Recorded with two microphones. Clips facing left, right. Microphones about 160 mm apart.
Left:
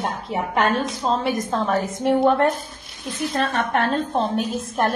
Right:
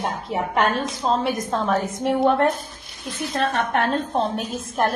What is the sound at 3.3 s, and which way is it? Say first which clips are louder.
Speech: right 1 dB; 40° left (ahead or behind).